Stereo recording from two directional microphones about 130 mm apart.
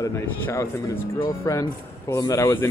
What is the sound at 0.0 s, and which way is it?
A man's voice, 25° left (ahead or behind).